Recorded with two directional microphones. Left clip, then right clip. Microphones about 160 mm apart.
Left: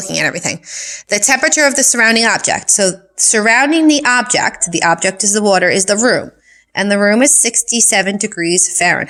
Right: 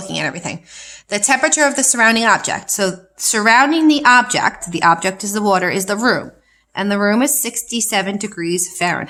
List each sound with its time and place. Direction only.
0.1 s a woman's voice: 30° left (ahead or behind)